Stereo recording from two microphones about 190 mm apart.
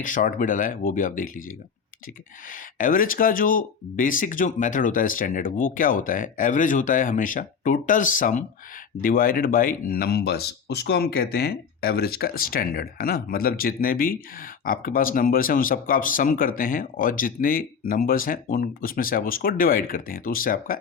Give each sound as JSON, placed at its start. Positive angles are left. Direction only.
{"t": 0.0, "sound": "speech", "side_deg": 45}